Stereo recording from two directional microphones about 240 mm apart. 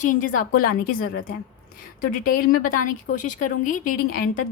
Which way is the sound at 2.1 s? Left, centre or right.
Left.